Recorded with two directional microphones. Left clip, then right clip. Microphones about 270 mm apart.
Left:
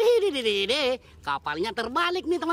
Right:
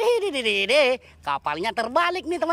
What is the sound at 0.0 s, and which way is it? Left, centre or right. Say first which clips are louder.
Speech: even; centre.